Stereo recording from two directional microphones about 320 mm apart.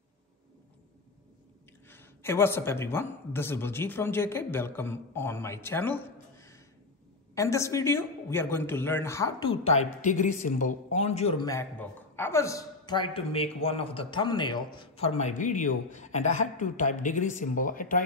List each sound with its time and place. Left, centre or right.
1.9 s speech: centre
9.5 s a woman's voice: centre